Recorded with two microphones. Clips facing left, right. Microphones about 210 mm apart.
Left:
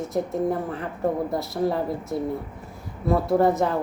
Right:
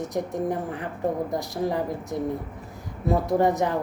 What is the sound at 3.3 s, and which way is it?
Speech, 15° right (ahead or behind).